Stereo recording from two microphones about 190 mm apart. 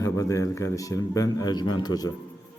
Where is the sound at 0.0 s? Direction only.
15° left (ahead or behind).